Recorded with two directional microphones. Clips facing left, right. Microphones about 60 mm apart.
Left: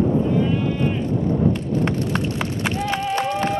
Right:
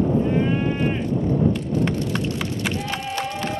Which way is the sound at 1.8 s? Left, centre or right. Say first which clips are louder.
Left 1 dB; left.